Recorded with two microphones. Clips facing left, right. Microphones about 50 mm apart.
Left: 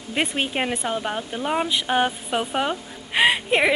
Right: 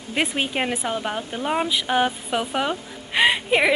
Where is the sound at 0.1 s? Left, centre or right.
Centre.